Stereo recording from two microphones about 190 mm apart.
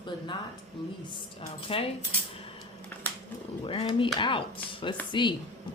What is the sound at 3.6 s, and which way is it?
Speech, 25° left (ahead or behind).